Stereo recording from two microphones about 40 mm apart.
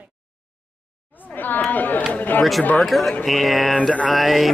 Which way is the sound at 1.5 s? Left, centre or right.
Left.